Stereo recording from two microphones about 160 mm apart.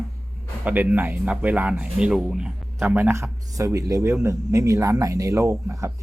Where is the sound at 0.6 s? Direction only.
10° right (ahead or behind).